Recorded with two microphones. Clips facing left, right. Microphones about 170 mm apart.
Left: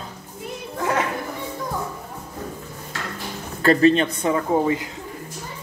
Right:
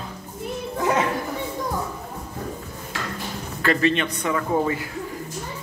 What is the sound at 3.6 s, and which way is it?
Speech, 35° left (ahead or behind).